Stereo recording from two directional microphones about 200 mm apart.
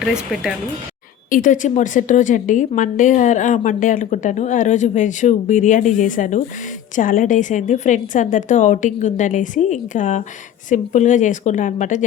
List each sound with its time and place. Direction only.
0.0 s speech: 5° right (ahead or behind)
1.3 s a woman's voice: 40° left (ahead or behind)